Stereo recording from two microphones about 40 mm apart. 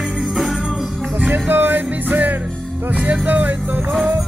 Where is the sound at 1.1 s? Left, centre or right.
Right.